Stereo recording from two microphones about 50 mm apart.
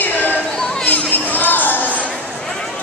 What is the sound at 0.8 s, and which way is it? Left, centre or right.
Crowd, left.